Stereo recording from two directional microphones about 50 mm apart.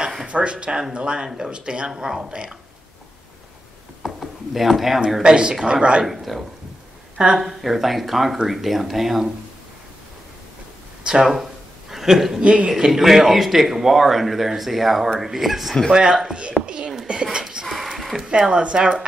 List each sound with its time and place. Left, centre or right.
0.3 s speech: right
4.0 s a sound: centre
5.2 s speech: centre
6.0 s speech: centre
11.1 s speech: centre
11.9 s speech: centre
16.6 s a sound: centre
17.6 s speech: centre